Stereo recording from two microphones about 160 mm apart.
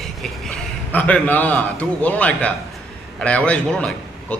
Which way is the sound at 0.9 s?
10° left (ahead or behind).